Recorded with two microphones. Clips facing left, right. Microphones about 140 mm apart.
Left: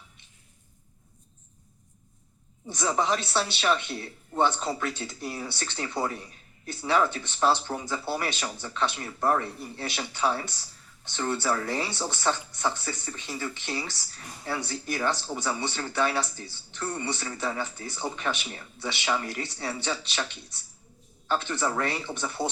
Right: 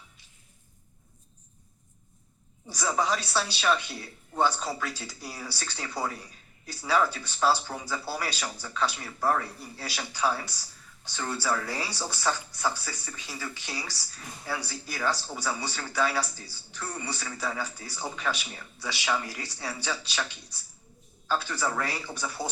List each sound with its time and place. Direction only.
2.6 s speech: 20° left (ahead or behind)
21.2 s speech: 20° left (ahead or behind)